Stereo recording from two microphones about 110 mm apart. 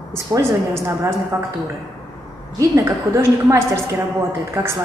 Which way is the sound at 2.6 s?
30° right (ahead or behind).